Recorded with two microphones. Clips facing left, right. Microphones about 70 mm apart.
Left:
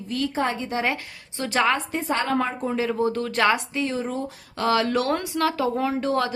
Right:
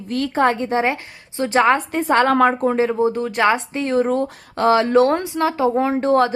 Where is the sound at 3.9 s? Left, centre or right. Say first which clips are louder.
Right 10 dB; right.